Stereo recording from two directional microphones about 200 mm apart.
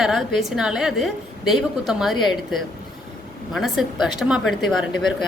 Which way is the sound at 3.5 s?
Centre (ahead or behind).